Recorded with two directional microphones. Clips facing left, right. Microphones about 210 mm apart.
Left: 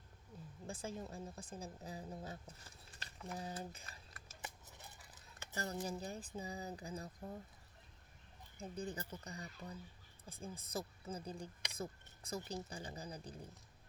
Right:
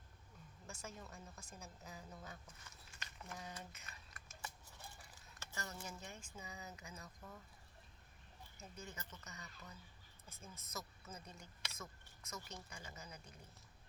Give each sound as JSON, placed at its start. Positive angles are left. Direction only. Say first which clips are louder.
{"t": 0.7, "sound": "a woman's voice", "louder": "left 7 dB", "side_deg": 30}
{"t": 4.4, "sound": "a sound", "louder": "left 1 dB", "side_deg": 20}
{"t": 5.5, "sound": "a woman's voice", "louder": "left 8 dB", "side_deg": 35}
{"t": 8.5, "sound": "a woman's voice", "louder": "left 9 dB", "side_deg": 30}